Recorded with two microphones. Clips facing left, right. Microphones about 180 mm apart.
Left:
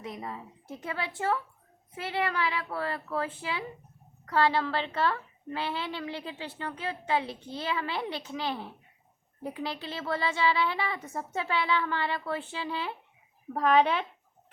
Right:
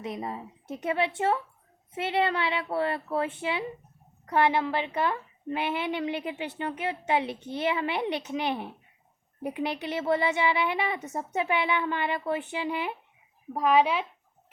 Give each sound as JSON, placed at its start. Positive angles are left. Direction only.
{"t": 0.0, "sound": "a woman's voice", "side_deg": -25}